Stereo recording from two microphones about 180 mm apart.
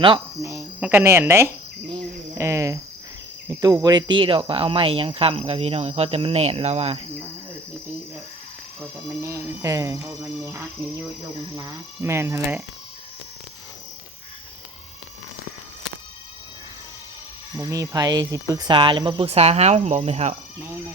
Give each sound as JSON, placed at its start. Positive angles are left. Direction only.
{"t": 0.0, "sound": "speech", "side_deg": -25}
{"t": 0.8, "sound": "speech", "side_deg": -10}
{"t": 2.4, "sound": "cricket", "side_deg": -15}
{"t": 3.6, "sound": "speech", "side_deg": -20}
{"t": 9.2, "sound": "speech", "side_deg": -15}
{"t": 17.6, "sound": "speech", "side_deg": -20}